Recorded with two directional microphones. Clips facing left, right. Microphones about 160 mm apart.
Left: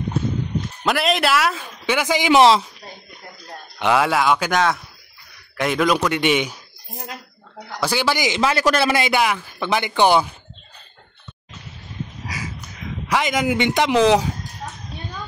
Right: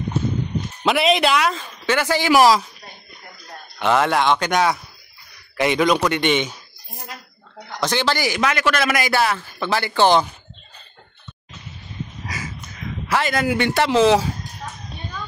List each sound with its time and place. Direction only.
0.8 s speech: centre (ahead or behind); by 2.6 s 25° left (ahead or behind)
3.8 s speech: 5° left (ahead or behind)
7.7 s speech: 10° left (ahead or behind)
8.4 s a man's voice: 30° left (ahead or behind)
9.1 s speech: 15° left (ahead or behind)
12.3 s a sound: 10° left (ahead or behind)
13.1 s speech: 15° left (ahead or behind)